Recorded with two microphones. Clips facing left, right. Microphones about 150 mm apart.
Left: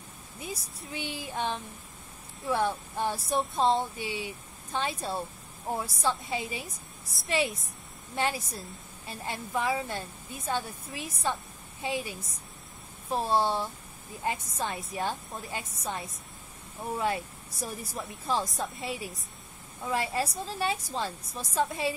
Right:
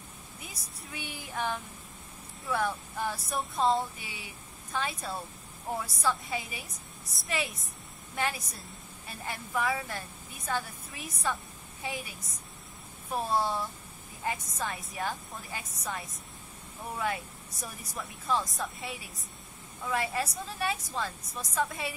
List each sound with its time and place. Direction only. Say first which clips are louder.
0.4 s a woman's voice: left 10 dB; 25° left (ahead or behind)
13.1 s a woman's voice: left 3 dB; 25° left (ahead or behind)